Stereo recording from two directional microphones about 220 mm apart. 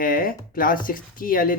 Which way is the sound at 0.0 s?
40° left (ahead or behind).